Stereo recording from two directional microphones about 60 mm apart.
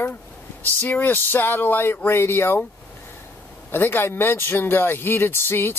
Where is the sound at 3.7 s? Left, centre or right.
Left.